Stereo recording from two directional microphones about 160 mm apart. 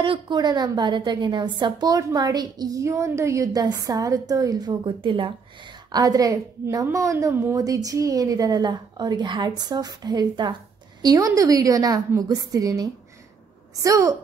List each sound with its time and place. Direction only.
0.0 s a woman's voice: 30° right (ahead or behind)